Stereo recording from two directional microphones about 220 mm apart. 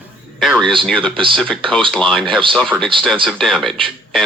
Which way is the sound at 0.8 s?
5° left (ahead or behind).